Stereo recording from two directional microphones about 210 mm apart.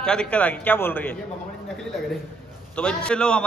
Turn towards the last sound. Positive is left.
turn(degrees=5)  # may be behind; listen again after turning